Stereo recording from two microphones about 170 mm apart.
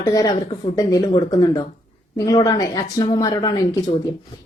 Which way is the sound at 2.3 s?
25° left (ahead or behind).